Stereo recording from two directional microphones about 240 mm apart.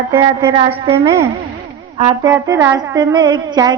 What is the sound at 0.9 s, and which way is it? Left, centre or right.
Female singing, centre.